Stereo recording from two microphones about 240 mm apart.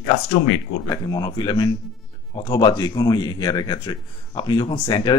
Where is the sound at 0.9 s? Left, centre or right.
Centre.